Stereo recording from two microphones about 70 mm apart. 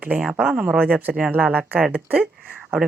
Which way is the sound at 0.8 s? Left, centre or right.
Right.